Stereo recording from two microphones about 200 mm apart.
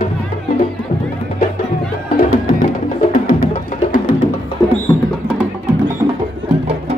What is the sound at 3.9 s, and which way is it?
Music, 40° left (ahead or behind).